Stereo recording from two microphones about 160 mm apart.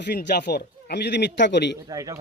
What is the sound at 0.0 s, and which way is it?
A man's voice, 90° left.